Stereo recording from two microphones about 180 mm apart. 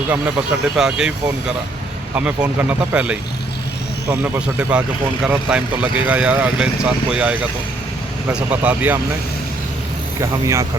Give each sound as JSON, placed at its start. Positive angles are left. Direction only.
{"t": 0.1, "sound": "speech", "side_deg": -5}
{"t": 10.2, "sound": "speech", "side_deg": -15}